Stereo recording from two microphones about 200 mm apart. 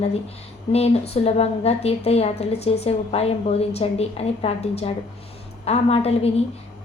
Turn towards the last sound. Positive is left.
turn(degrees=30)  # may be behind; listen again after turning